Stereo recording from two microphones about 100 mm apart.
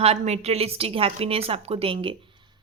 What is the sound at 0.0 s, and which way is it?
A woman's voice, 90° right.